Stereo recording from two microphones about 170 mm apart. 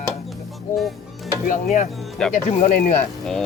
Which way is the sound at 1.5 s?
50° left (ahead or behind).